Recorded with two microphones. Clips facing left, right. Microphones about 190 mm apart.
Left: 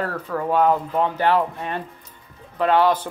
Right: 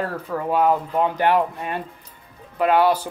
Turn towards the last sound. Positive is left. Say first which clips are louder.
# even
turn(degrees=-10)  # may be behind; listen again after turning